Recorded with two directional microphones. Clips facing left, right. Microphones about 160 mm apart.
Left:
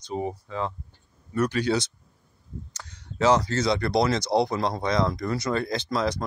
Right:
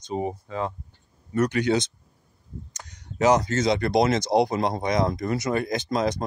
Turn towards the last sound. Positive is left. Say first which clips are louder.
# right 2 dB
turn(degrees=-15)  # may be behind; listen again after turning